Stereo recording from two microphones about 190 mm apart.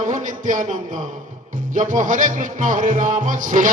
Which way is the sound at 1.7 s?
45° right (ahead or behind).